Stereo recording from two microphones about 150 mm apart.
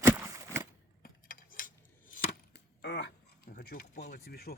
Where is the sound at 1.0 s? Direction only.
65° left (ahead or behind).